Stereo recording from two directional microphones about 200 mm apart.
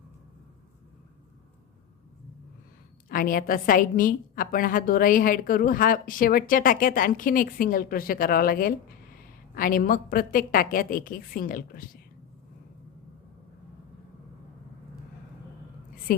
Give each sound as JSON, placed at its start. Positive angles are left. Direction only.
{"t": 3.1, "sound": "a woman's voice", "side_deg": 45}
{"t": 16.1, "sound": "a woman's voice", "side_deg": 45}